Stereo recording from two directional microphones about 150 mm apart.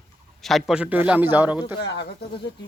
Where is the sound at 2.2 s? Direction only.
90° left.